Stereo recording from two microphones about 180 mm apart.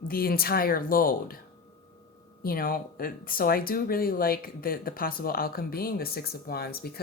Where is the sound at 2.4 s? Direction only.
55° left (ahead or behind).